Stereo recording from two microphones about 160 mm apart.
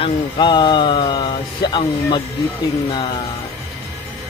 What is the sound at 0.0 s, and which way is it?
Speech, 30° left (ahead or behind).